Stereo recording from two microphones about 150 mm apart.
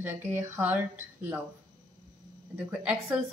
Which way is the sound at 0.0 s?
15° right (ahead or behind).